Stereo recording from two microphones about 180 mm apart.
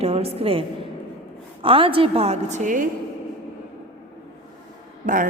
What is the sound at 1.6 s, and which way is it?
A woman's voice, 30° right (ahead or behind).